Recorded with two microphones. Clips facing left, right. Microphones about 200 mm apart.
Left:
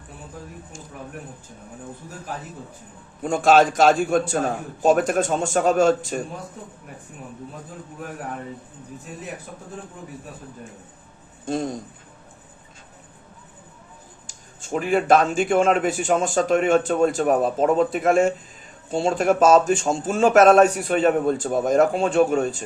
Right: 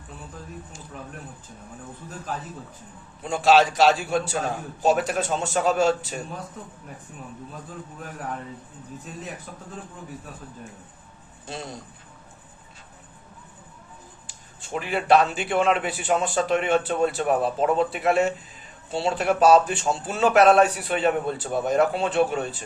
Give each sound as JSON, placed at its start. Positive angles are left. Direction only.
{"t": 3.2, "sound": "a man's voice", "side_deg": 50}
{"t": 11.4, "sound": "a man's voice", "side_deg": 45}
{"t": 14.3, "sound": "a man's voice", "side_deg": 45}